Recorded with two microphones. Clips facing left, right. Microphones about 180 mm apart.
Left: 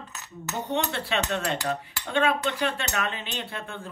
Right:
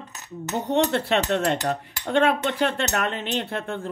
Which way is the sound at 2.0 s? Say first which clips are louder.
Right 4 dB; 50° right (ahead or behind).